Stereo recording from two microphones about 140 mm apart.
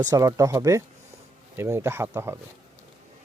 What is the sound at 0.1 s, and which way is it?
Speech, 25° right (ahead or behind).